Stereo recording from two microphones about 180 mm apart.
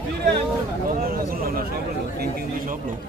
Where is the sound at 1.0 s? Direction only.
55° right (ahead or behind).